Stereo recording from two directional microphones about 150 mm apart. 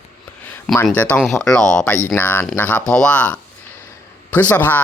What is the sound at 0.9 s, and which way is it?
Speech, 10° left (ahead or behind).